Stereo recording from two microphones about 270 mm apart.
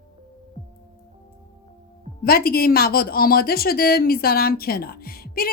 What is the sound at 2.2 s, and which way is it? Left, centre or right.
A woman's voice, left.